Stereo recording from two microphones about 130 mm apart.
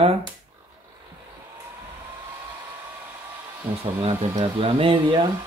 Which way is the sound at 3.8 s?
45° right (ahead or behind).